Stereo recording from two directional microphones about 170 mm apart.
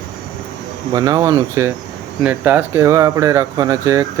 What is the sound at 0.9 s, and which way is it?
Speech, 20° right (ahead or behind).